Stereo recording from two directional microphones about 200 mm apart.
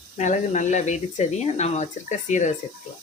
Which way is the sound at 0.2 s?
35° left (ahead or behind).